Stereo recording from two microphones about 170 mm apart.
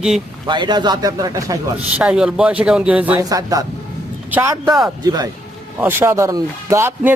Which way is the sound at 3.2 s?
20° right (ahead or behind).